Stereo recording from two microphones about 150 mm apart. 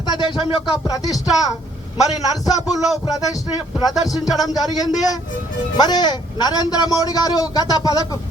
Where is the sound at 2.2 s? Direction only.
25° left (ahead or behind).